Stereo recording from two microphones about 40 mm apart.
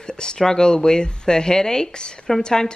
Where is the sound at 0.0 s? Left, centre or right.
Centre.